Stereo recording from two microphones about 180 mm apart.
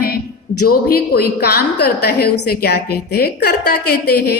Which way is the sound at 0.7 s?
55° left (ahead or behind).